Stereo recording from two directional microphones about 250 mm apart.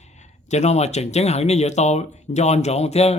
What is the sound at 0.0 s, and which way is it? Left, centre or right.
Speech, left.